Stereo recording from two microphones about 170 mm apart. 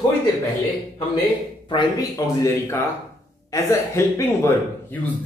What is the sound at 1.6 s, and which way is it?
A man's voice, 25° left (ahead or behind).